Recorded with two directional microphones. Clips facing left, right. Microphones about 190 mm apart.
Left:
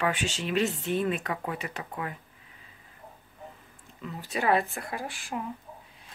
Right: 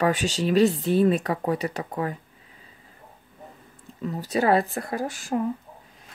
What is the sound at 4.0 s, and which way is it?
Speech, 40° right (ahead or behind).